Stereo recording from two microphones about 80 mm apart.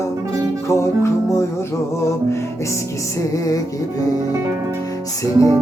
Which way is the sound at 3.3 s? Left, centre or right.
Left.